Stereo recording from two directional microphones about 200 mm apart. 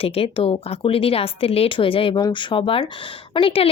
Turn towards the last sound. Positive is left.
turn(degrees=25)  # may be behind; listen again after turning